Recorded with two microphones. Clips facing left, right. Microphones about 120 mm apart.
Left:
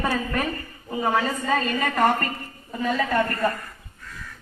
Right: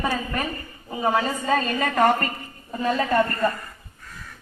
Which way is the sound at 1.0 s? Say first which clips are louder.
Right 1 dB; 15° right (ahead or behind).